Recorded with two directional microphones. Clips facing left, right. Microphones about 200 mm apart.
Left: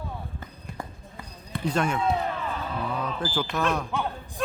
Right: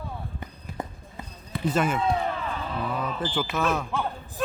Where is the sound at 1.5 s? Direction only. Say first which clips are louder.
Right 1 dB; 5° right (ahead or behind).